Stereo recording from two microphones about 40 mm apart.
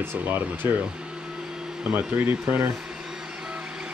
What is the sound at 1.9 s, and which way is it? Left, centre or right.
Speech, right.